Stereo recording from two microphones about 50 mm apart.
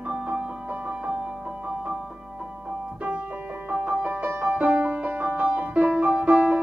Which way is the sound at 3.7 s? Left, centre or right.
Right.